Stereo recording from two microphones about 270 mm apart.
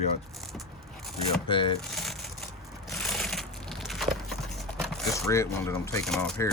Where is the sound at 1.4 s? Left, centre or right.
Centre.